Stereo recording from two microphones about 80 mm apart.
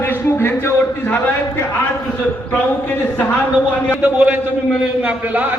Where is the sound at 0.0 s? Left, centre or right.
Left.